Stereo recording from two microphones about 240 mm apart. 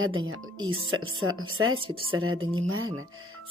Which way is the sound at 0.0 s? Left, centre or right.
Right.